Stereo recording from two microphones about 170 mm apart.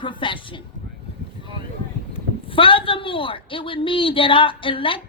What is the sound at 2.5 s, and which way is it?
Speech, 30° left (ahead or behind).